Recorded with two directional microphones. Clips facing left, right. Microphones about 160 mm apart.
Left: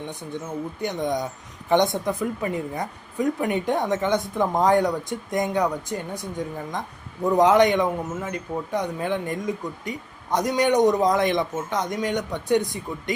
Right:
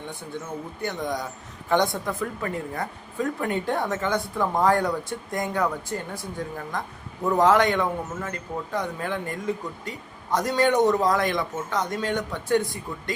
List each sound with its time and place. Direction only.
0.8 s a man's voice: 20° left (ahead or behind)